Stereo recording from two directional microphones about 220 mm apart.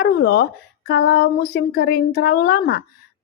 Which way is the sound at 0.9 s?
45° left (ahead or behind).